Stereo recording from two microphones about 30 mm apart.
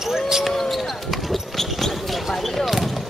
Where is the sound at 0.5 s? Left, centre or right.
Centre.